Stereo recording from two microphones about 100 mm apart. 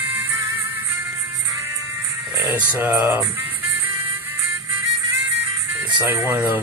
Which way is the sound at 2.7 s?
20° right (ahead or behind).